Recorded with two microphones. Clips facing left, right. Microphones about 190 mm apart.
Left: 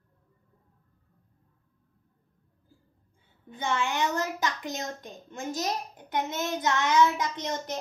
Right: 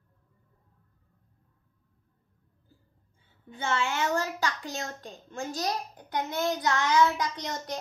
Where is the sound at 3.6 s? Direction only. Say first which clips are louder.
Left 1 dB; 15° left (ahead or behind).